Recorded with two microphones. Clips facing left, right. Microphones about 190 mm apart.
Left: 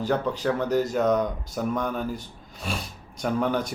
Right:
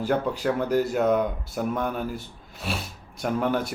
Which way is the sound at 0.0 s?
10° right (ahead or behind).